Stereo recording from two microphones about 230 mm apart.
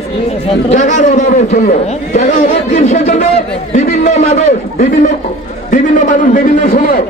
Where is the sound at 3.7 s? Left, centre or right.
Left.